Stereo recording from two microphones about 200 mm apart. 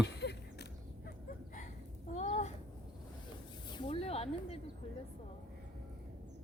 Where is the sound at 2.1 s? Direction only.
35° left (ahead or behind).